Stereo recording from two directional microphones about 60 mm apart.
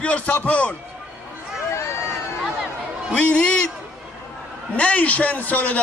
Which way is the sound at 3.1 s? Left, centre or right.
Centre.